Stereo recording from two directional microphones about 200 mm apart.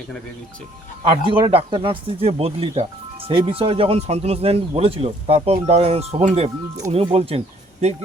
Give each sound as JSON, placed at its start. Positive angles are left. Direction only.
{"t": 1.3, "sound": "speech", "side_deg": -25}